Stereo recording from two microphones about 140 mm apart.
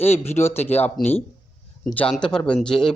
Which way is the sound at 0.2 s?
20° left (ahead or behind).